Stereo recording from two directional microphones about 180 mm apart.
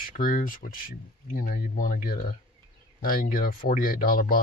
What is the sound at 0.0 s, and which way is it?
Speech, 50° left (ahead or behind).